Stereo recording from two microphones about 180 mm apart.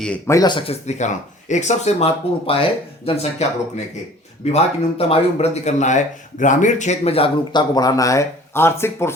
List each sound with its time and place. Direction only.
0.0 s speech: 5° left (ahead or behind)
0.3 s speech: 25° left (ahead or behind)
4.5 s speech: 35° left (ahead or behind); by 9.1 s 15° left (ahead or behind)